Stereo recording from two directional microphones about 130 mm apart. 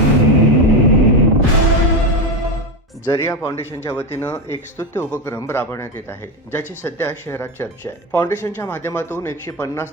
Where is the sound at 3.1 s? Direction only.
20° left (ahead or behind).